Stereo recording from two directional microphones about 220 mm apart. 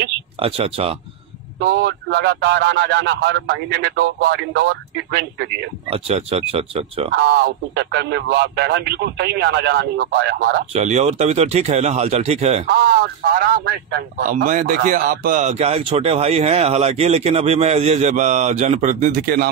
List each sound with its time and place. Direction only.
0.4 s speech: 25° right (ahead or behind)
1.6 s a man's voice: 50° right (ahead or behind)
5.9 s speech: 25° right (ahead or behind)
7.1 s a man's voice: 50° right (ahead or behind)
10.7 s speech: 30° right (ahead or behind)
12.7 s a man's voice: 45° right (ahead or behind)